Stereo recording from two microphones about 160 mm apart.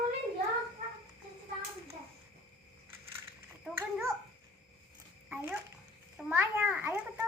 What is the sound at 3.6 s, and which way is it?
Babbling, 10° right (ahead or behind).